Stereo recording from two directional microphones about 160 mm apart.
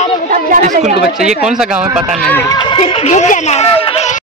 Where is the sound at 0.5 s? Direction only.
50° right (ahead or behind).